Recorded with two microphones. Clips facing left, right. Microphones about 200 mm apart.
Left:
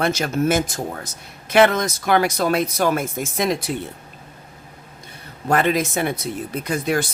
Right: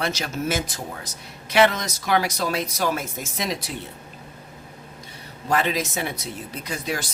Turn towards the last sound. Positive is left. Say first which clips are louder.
# left 7 dB
turn(degrees=55)  # may be behind; listen again after turning